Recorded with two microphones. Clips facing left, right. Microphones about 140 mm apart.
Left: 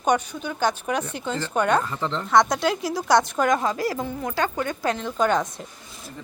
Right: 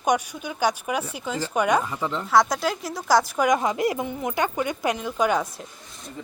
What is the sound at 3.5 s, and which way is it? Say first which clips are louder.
A woman's voice: right 1 dB; 20° right (ahead or behind).